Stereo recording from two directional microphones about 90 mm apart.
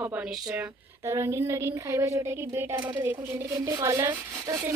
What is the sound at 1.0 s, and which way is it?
Speech, 30° right (ahead or behind).